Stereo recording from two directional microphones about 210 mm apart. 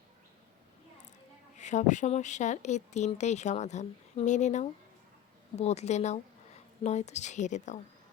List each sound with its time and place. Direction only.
1.5 s speech: 35° left (ahead or behind)